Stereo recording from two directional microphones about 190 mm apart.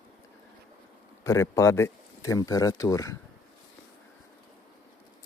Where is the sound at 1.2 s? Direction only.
15° left (ahead or behind).